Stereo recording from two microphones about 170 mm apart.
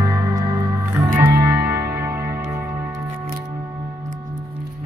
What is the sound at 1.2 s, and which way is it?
Music, 15° right (ahead or behind).